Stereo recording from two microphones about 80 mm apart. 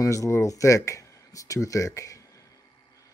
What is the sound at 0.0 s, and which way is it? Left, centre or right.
Speech, left.